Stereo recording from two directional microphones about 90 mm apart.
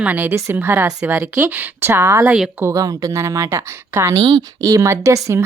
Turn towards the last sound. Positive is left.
turn(degrees=-35)  # may be behind; listen again after turning